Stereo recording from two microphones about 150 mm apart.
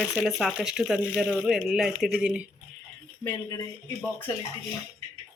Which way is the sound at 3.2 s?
20° left (ahead or behind).